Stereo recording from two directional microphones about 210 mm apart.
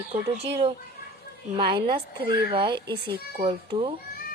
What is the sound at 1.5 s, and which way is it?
Speech, 20° right (ahead or behind).